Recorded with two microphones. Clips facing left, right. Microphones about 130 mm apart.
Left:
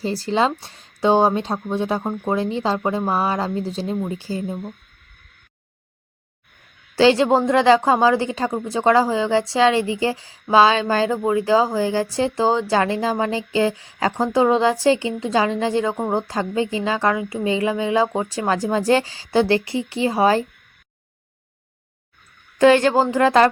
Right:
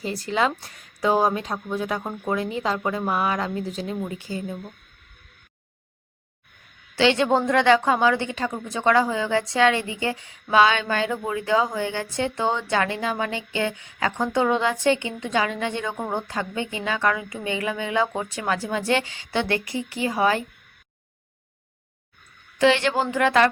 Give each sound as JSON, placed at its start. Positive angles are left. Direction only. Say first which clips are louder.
{"t": 0.0, "sound": "a woman's voice", "louder": "left 4 dB", "side_deg": 30}
{"t": 6.9, "sound": "a woman's voice", "louder": "left 5 dB", "side_deg": 35}
{"t": 22.5, "sound": "a woman's voice", "louder": "left 6 dB", "side_deg": 45}